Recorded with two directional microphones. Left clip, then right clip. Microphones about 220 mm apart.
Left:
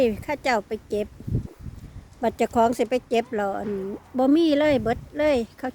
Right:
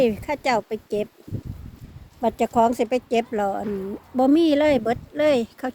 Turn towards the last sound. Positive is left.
turn(degrees=-5)  # may be behind; listen again after turning